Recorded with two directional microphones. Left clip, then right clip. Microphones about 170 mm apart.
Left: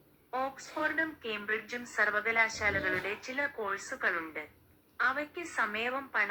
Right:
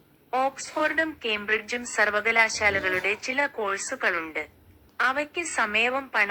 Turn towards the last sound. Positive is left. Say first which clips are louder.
# right 9 dB
turn(degrees=-35)  # may be behind; listen again after turning